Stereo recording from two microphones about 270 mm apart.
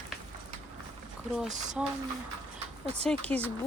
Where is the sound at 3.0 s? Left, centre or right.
Centre.